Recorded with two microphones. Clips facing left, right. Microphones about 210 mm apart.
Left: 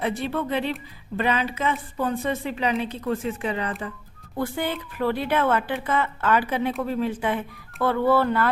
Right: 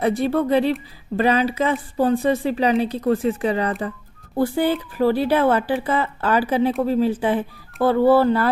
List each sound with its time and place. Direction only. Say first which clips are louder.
0.0 s speech: right 7 dB; 40° right (ahead or behind)